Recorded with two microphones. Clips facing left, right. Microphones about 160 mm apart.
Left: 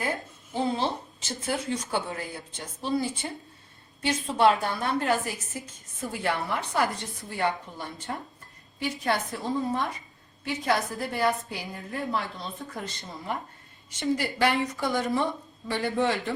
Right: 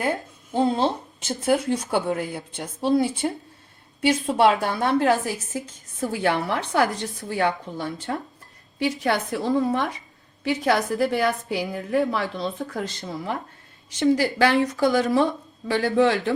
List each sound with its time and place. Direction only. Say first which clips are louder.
0.5 s a woman's voice: right 6 dB; 55° right (ahead or behind); by 9.8 s 70° right (ahead or behind)
10.4 s a woman's voice: right 5 dB; 90° right